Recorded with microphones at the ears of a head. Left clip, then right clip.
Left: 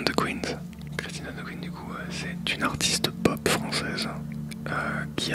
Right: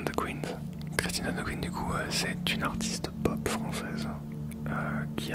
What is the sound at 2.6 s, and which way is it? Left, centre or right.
Whispering, left.